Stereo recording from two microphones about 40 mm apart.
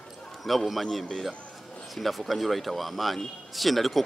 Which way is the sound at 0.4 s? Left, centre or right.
Centre.